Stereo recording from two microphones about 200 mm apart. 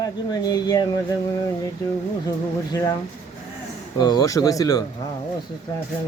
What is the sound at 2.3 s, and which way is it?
Speech, 15° left (ahead or behind).